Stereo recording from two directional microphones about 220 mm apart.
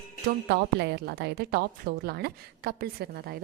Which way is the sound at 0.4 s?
50° right (ahead or behind).